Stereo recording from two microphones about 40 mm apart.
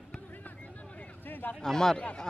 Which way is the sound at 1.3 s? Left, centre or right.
Left.